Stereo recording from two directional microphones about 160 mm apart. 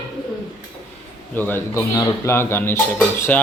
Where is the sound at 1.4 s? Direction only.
15° left (ahead or behind).